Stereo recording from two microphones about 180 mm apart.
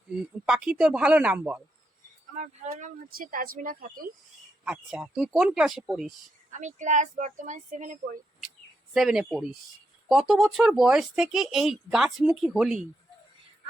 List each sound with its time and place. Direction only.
0.4 s speech: 5° right (ahead or behind)
2.3 s speech: 40° right (ahead or behind)
4.6 s speech: 5° right (ahead or behind)
6.5 s speech: 45° right (ahead or behind)
8.9 s speech: centre (ahead or behind)